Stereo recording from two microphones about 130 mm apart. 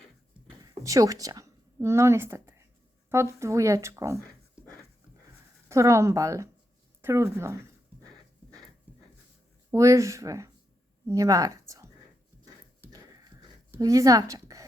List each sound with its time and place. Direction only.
0.6 s a woman's voice: 30° right (ahead or behind)
5.6 s speech: 20° right (ahead or behind)
8.9 s a sound: 10° right (ahead or behind)
9.7 s speech: 25° right (ahead or behind)
13.7 s a woman's voice: 25° right (ahead or behind)